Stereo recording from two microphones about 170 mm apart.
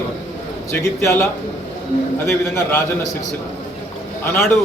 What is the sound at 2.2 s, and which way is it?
Speech, 15° left (ahead or behind).